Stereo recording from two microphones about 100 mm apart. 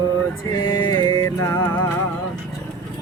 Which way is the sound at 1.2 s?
35° left (ahead or behind).